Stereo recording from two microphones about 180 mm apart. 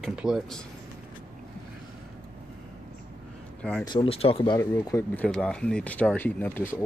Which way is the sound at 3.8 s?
25° left (ahead or behind).